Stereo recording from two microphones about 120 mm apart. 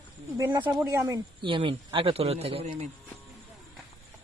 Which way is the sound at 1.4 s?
45° right (ahead or behind).